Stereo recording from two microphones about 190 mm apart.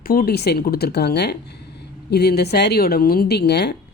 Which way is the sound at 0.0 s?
50° left (ahead or behind).